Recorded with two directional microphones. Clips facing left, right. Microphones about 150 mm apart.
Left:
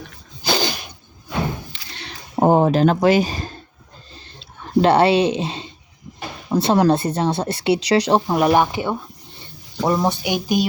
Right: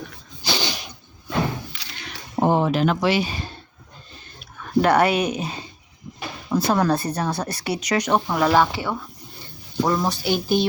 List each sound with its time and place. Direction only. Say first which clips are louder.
0.4 s sneeze: left 5 dB; 50° left (ahead or behind)
2.0 s speech: left 4 dB; 35° left (ahead or behind)
4.1 s a sound: left 3 dB; 25° left (ahead or behind)
6.5 s a woman's voice: left 4 dB; 25° left (ahead or behind)